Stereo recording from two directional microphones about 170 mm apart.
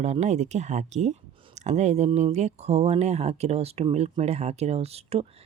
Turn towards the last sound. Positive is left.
turn(degrees=-35)  # may be behind; listen again after turning